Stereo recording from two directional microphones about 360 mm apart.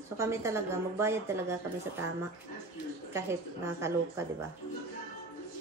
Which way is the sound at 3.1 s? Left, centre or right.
Centre.